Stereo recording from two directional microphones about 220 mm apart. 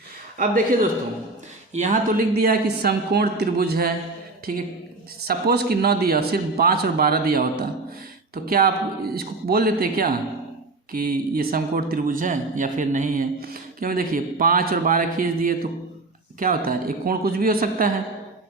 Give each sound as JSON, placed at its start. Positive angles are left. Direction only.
{"t": 0.3, "sound": "a man's voice", "side_deg": -40}